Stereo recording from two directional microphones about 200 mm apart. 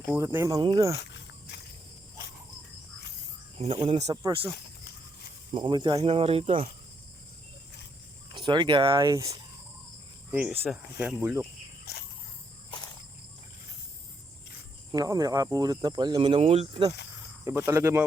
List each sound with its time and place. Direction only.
0.1 s speech: 10° right (ahead or behind)
3.6 s speech: 30° right (ahead or behind)
4.2 s speech: 15° right (ahead or behind)
5.5 s speech: 25° right (ahead or behind)
8.3 s speech: 25° right (ahead or behind)
10.3 s speech: 10° right (ahead or behind)
11.9 s cricket: 55° left (ahead or behind)
14.9 s speech: 20° right (ahead or behind)
17.4 s speech: 15° right (ahead or behind)